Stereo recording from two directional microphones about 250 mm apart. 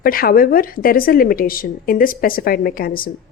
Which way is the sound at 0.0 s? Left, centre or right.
Left.